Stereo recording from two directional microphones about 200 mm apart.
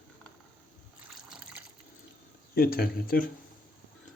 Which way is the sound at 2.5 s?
50° left (ahead or behind).